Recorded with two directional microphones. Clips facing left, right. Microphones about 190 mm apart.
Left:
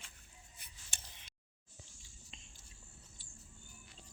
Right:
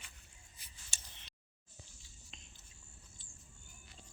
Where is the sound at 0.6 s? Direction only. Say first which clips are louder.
Left 1 dB; 60° left (ahead or behind).